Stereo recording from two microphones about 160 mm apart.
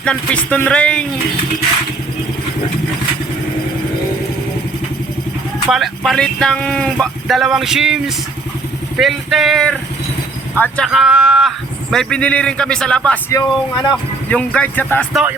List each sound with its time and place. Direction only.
0.0 s speech: 5° left (ahead or behind)
5.6 s speech: centre (ahead or behind)
13.3 s speech: 25° left (ahead or behind)
14.3 s speech: 10° left (ahead or behind)
15.1 s speech: 5° right (ahead or behind)